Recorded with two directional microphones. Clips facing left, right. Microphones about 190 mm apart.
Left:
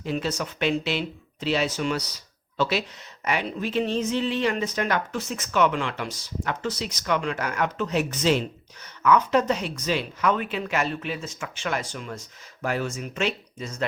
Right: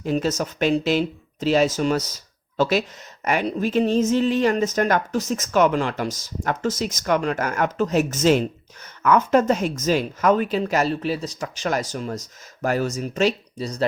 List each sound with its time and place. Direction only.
0.0 s speech: 45° right (ahead or behind)